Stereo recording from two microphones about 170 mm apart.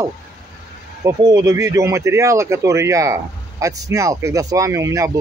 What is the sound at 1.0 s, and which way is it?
Speech, 20° right (ahead or behind).